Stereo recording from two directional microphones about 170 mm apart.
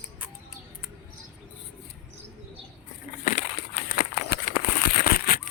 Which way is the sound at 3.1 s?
50° left (ahead or behind).